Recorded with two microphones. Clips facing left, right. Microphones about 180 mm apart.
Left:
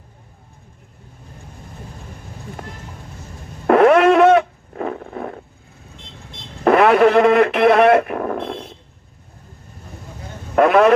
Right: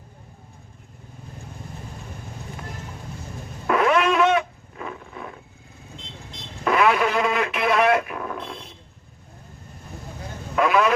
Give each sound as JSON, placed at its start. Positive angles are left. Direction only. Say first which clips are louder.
{"t": 3.7, "sound": "a sound", "louder": "left 9 dB", "side_deg": 55}
{"t": 6.7, "sound": "radio", "louder": "left 8 dB", "side_deg": 55}
{"t": 10.5, "sound": "a man's voice", "louder": "left 7 dB", "side_deg": 60}